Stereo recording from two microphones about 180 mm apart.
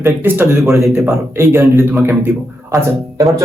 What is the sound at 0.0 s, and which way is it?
A man's voice, 10° right (ahead or behind).